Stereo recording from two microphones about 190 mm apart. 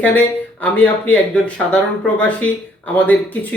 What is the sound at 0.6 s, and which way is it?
Speech, 10° left (ahead or behind).